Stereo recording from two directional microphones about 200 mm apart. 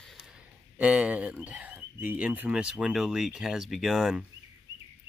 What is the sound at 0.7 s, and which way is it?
Speech, 5° right (ahead or behind).